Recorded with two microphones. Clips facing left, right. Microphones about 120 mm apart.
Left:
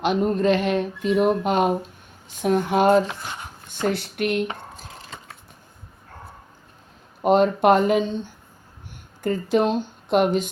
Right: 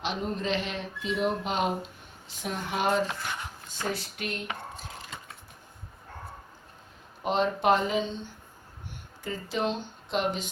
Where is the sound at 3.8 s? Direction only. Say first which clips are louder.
Left 10 dB; 65° left (ahead or behind).